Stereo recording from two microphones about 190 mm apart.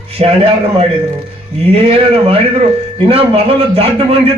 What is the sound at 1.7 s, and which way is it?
A man's voice, 30° right (ahead or behind).